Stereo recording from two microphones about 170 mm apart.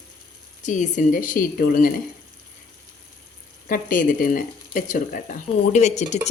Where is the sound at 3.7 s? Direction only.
55° left (ahead or behind).